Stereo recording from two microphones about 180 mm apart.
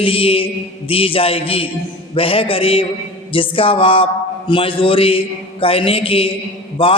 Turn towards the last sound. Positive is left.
turn(degrees=30)  # may be behind; listen again after turning